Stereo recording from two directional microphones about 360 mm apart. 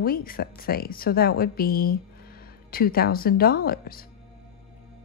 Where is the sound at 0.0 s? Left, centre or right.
Left.